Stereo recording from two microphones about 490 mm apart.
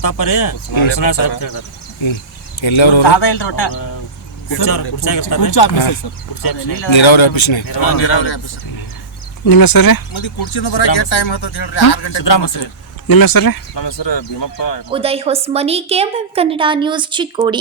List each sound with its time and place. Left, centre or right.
0.0 s speech: left
2.0 s speech: left
5.3 s speech: left
6.8 s speech: left
7.7 s speech: left
8.0 s speech: left
9.5 s speech: left
10.1 s speech: left
12.2 s speech: left
14.8 s a woman's voice: centre